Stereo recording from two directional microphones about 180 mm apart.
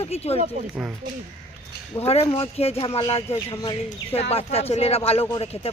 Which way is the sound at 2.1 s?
35° left (ahead or behind).